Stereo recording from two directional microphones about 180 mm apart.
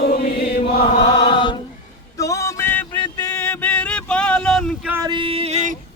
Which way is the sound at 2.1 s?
15° left (ahead or behind).